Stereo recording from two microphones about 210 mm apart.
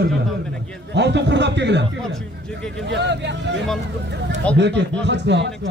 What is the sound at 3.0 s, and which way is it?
A man's voice, 55° right (ahead or behind).